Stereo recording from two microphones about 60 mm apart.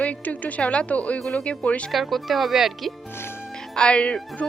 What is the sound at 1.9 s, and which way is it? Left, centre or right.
Speech, centre.